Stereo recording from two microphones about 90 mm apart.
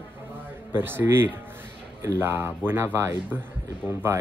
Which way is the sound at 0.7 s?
25° right (ahead or behind).